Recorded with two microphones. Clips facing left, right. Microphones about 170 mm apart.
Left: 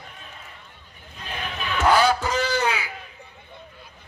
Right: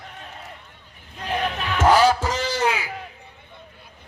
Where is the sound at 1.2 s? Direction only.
75° right (ahead or behind).